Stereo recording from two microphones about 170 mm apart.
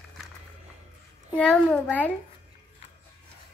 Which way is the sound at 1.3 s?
5° left (ahead or behind).